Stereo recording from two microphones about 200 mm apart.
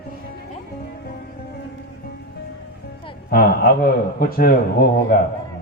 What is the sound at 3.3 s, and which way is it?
A man's voice, 50° left (ahead or behind).